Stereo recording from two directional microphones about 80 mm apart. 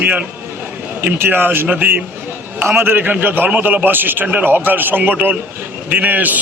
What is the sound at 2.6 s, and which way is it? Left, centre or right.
A man's voice, right.